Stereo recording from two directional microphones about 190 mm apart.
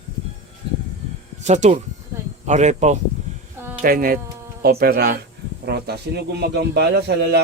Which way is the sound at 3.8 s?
50° right (ahead or behind).